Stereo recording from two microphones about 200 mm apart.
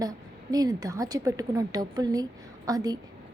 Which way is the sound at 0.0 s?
20° right (ahead or behind).